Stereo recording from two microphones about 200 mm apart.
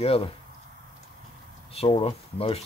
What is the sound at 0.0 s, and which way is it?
Speech, 30° left (ahead or behind).